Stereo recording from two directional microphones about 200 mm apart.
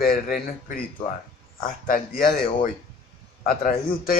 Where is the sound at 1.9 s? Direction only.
45° left (ahead or behind).